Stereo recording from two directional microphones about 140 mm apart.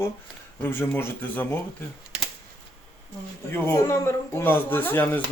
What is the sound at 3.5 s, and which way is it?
Speech, 15° left (ahead or behind).